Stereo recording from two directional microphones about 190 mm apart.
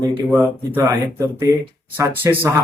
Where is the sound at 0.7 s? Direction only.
15° right (ahead or behind).